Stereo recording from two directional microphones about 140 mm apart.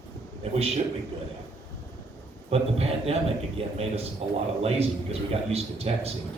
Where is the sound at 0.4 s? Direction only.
45° right (ahead or behind).